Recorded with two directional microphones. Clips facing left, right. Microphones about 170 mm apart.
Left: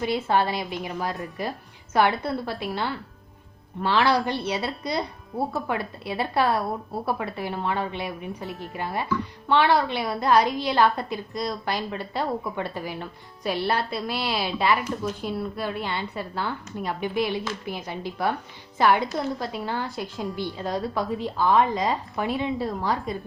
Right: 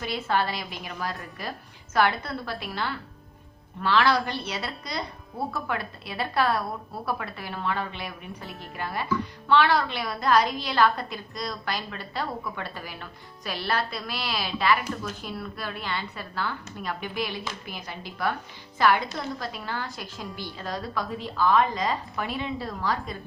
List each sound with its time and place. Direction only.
0.0 s a woman's voice: 20° left (ahead or behind)